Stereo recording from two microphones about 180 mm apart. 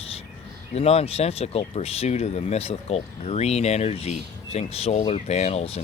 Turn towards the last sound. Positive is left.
turn(degrees=35)  # may be behind; listen again after turning